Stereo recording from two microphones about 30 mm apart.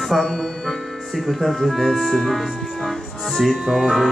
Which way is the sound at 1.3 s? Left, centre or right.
Centre.